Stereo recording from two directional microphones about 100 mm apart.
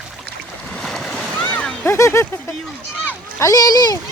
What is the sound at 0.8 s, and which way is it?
Boat, 5° left (ahead or behind).